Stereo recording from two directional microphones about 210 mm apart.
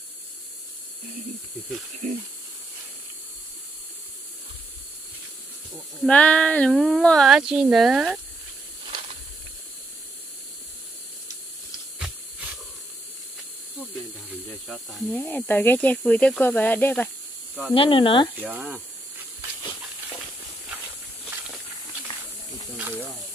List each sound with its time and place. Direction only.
2.0 s speech: 35° right (ahead or behind)
6.0 s speech: 5° left (ahead or behind)
14.7 s speech: centre (ahead or behind)
15.1 s speech: 10° left (ahead or behind)
17.7 s speech: 25° left (ahead or behind)
18.4 s speech: 10° right (ahead or behind)